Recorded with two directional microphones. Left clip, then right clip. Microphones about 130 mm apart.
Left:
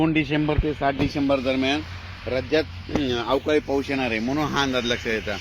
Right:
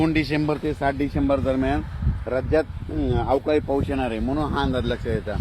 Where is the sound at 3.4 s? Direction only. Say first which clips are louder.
Even; 15° left (ahead or behind).